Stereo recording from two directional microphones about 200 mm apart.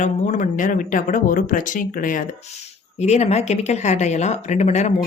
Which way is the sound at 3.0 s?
35° left (ahead or behind).